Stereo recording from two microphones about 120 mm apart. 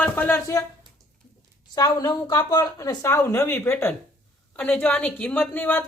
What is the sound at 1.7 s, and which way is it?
A woman's voice, 35° left (ahead or behind).